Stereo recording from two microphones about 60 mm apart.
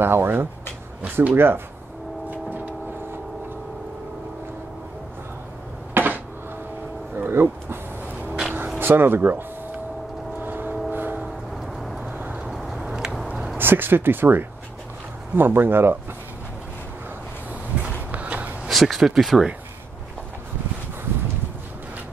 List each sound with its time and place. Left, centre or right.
0.0 s speech: right
2.2 s vehicle: right
5.9 s a sound: right
8.1 s vehicle: right
8.7 s speech: right
10.4 s vehicle: right
10.9 s train: right
12.1 s vehicle: right
12.4 s a sound: centre
12.8 s a sound: centre
13.6 s speech: right
17.7 s a sound: centre
18.7 s speech: centre